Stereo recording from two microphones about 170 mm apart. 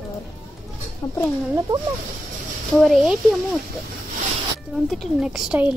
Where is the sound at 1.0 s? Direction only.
25° left (ahead or behind).